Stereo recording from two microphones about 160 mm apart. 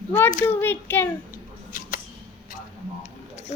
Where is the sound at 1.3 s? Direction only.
60° left (ahead or behind).